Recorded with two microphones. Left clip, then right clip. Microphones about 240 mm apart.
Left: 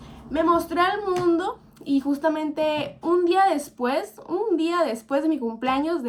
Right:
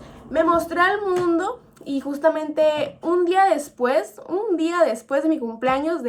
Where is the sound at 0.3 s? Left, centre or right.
Left.